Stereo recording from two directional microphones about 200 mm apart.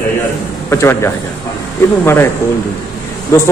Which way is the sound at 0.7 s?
15° left (ahead or behind).